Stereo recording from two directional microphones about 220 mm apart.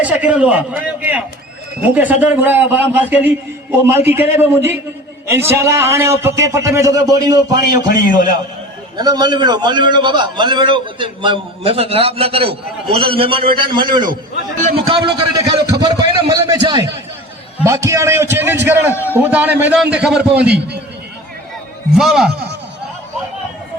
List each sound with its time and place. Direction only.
0.0 s a man's voice: 5° right (ahead or behind)
1.8 s a man's voice: 5° right (ahead or behind)
7.9 s a man's voice: 40° left (ahead or behind)
9.0 s a man's voice: 20° right (ahead or behind)
21.9 s a man's voice: centre (ahead or behind)